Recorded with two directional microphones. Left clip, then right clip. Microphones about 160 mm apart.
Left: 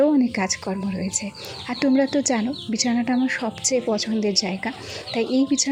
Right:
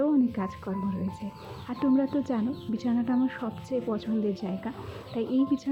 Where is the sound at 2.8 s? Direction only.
20° left (ahead or behind).